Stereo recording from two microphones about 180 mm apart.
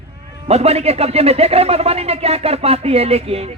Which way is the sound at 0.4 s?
35° right (ahead or behind).